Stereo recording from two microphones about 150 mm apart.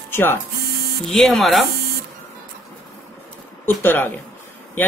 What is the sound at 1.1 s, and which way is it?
Speech, centre (ahead or behind).